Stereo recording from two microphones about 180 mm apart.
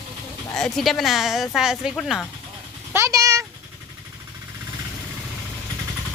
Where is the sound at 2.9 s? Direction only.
15° right (ahead or behind).